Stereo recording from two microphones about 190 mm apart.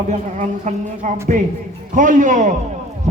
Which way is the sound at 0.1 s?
40° right (ahead or behind).